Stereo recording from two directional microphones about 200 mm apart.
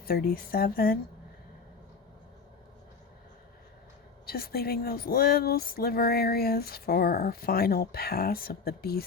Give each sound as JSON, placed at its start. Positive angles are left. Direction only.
{"t": 0.0, "sound": "speech", "side_deg": 50}
{"t": 4.3, "sound": "speech", "side_deg": 50}